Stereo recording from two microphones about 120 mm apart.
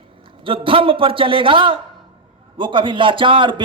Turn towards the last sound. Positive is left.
turn(degrees=-40)  # may be behind; listen again after turning